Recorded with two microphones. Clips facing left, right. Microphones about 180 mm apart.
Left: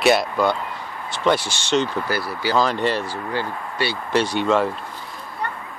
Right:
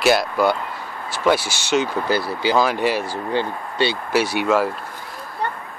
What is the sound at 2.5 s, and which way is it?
Speech, 10° right (ahead or behind).